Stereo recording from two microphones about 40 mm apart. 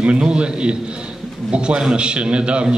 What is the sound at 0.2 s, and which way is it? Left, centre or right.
A man's voice, right.